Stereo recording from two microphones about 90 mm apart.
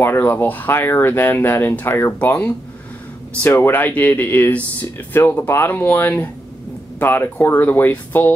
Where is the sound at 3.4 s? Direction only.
25° left (ahead or behind).